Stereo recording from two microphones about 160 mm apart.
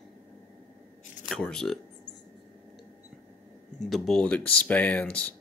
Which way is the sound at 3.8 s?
Centre (ahead or behind).